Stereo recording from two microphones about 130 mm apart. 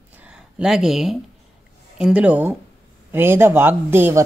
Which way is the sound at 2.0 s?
10° right (ahead or behind).